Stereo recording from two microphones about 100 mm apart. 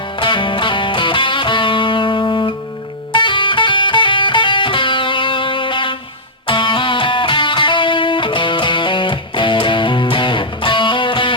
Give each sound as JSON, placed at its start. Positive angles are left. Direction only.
{"t": 0.2, "sound": "music", "side_deg": 55}